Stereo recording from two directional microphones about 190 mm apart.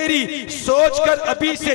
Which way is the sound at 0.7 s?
25° left (ahead or behind).